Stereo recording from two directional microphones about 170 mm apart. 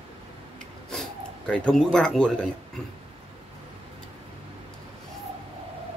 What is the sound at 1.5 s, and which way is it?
Speech, 5° left (ahead or behind).